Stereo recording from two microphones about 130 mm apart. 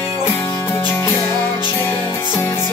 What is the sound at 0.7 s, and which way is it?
Music, 15° left (ahead or behind).